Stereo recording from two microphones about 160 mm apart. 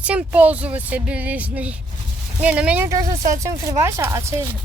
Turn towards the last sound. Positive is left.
turn(degrees=-15)  # may be behind; listen again after turning